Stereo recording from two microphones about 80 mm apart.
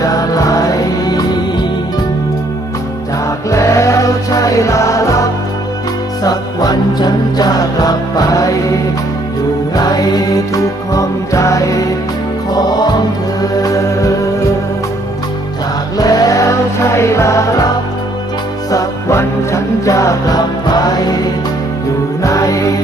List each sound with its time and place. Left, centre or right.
0.0 s music: left
3.5 s music: left
6.2 s music: left
9.7 s music: left
12.5 s music: left
13.6 s music: left
16.0 s music: left
18.7 s music: left
22.2 s music: left